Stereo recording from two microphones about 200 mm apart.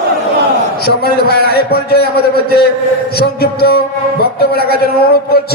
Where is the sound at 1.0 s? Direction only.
50° left (ahead or behind).